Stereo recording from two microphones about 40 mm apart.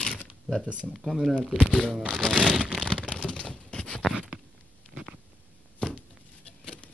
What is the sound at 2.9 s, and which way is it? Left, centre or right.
Computer keyboard, left.